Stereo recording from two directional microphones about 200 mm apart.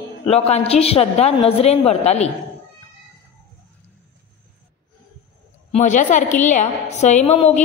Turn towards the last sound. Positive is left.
turn(degrees=35)  # may be behind; listen again after turning